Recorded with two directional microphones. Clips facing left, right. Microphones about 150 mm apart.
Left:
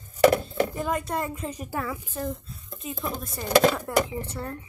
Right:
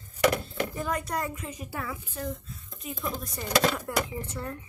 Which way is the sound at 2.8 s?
25° left (ahead or behind).